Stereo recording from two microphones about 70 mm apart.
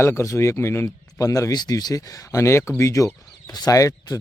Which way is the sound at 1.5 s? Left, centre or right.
Left.